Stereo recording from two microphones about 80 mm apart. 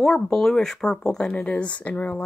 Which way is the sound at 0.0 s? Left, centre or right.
Centre.